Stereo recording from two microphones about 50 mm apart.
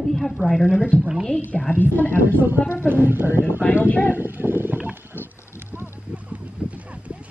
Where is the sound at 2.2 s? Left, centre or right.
Right.